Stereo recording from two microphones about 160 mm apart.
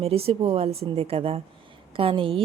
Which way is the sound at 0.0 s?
40° right (ahead or behind).